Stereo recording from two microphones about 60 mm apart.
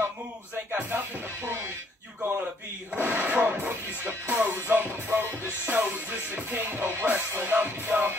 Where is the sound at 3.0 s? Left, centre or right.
Right.